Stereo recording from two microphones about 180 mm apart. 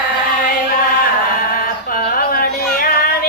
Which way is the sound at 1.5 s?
55° left (ahead or behind).